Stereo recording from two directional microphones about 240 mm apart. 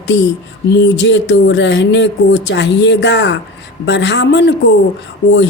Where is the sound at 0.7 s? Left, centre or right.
Left.